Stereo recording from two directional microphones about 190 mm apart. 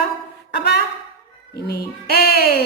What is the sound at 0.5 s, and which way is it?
Music, 60° left (ahead or behind).